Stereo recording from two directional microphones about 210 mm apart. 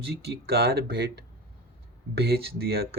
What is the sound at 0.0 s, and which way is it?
Speech, 50° right (ahead or behind).